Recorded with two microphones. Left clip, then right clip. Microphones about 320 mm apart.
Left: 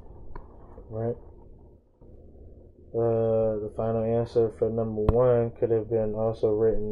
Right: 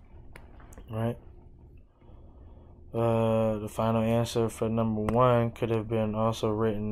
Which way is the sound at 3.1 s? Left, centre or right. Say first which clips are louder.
Left 3 dB; right.